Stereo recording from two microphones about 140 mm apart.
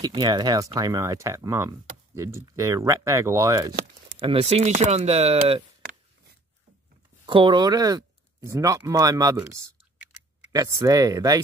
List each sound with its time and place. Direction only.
0.0 s speech: 30° right (ahead or behind)
4.2 s speech: 40° right (ahead or behind)
7.2 s speech: 35° right (ahead or behind)